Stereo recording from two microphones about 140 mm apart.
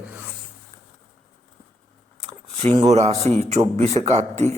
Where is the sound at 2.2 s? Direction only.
50° right (ahead or behind).